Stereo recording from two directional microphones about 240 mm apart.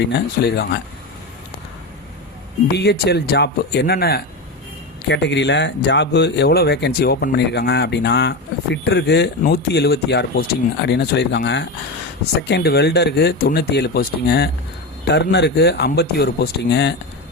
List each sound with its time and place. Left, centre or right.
0.4 s speech: left
2.7 s speech: left